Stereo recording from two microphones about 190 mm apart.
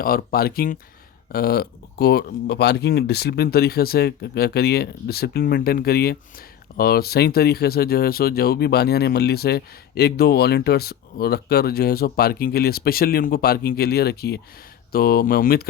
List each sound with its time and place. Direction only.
0.0 s speech: 50° left (ahead or behind)